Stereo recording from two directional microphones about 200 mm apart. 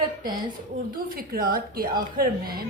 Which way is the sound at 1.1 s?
45° right (ahead or behind).